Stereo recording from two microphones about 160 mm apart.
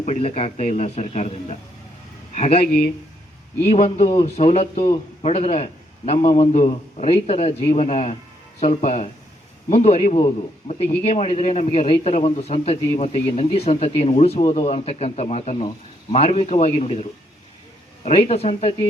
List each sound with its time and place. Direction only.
0.0 s a man's voice: 45° left (ahead or behind)
3.6 s a man's voice: 40° left (ahead or behind)